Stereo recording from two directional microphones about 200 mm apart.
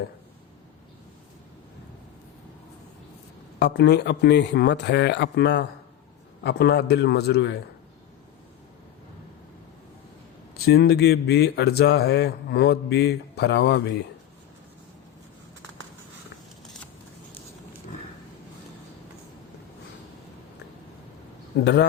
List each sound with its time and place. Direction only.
3.6 s a man's voice: 55° left (ahead or behind)
10.7 s a man's voice: 55° left (ahead or behind)
21.6 s a man's voice: 60° left (ahead or behind)